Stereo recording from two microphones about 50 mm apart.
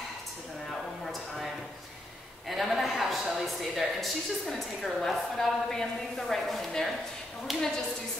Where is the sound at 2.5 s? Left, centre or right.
Centre.